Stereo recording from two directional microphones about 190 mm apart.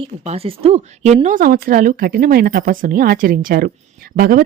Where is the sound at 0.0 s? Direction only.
30° right (ahead or behind).